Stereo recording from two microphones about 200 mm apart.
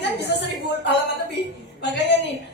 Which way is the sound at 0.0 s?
55° left (ahead or behind).